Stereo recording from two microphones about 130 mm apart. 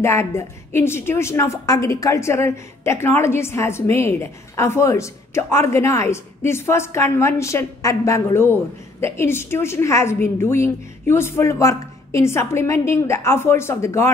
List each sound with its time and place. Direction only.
0.0 s a woman's voice: 20° left (ahead or behind)